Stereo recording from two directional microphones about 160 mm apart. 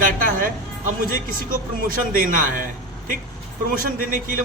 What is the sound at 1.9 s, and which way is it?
Speech, 60° right (ahead or behind).